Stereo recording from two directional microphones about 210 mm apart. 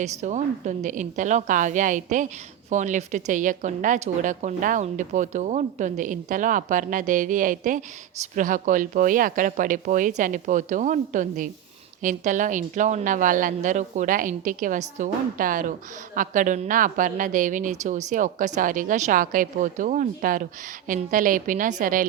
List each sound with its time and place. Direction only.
0.0 s a woman's voice: 35° right (ahead or behind)